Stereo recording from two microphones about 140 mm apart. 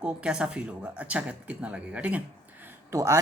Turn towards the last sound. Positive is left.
turn(degrees=-20)  # may be behind; listen again after turning